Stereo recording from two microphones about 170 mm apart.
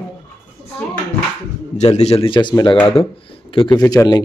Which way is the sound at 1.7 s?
40° left (ahead or behind).